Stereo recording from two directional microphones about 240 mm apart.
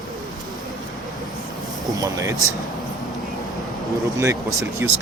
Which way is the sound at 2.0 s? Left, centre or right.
Centre.